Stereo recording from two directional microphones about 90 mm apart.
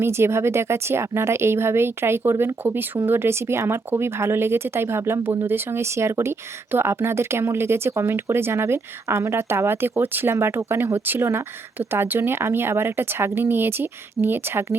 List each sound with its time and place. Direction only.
0.0 s speech: 30° right (ahead or behind)